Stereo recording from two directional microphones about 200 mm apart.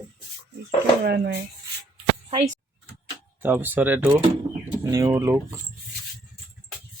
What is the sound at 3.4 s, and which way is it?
Speech, 10° right (ahead or behind).